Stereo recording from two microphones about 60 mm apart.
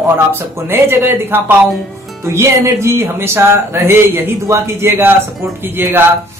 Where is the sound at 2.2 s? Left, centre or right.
Right.